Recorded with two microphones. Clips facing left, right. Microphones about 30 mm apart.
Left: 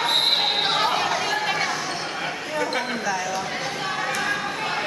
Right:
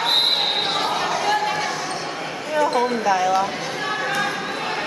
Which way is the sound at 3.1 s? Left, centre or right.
Right.